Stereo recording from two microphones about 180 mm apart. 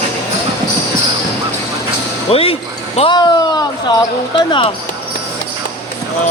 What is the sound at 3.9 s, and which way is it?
Speech, 25° left (ahead or behind).